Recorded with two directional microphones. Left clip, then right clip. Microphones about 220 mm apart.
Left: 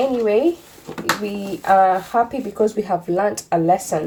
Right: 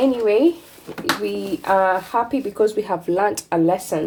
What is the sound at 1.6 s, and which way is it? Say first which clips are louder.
Speech: left 3 dB; 35° right (ahead or behind).